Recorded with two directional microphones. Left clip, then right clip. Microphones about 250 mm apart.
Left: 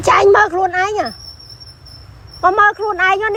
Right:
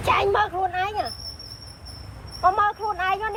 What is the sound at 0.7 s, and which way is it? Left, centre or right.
Speech, left.